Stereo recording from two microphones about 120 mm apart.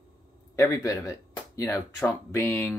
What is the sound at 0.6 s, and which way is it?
Speech, 25° left (ahead or behind).